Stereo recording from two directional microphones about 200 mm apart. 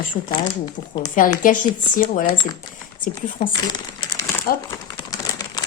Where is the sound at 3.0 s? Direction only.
40° left (ahead or behind).